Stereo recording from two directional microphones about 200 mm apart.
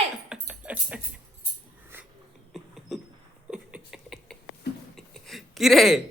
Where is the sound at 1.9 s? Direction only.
10° right (ahead or behind).